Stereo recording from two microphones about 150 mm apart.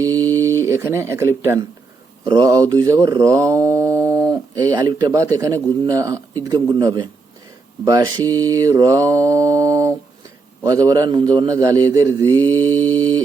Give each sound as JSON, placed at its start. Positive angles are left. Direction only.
{"t": 0.0, "sound": "mantra", "side_deg": -25}
{"t": 0.3, "sound": "speech", "side_deg": -20}
{"t": 2.2, "sound": "mantra", "side_deg": -30}
{"t": 12.6, "sound": "mantra", "side_deg": 10}
{"t": 13.0, "sound": "mantra", "side_deg": -25}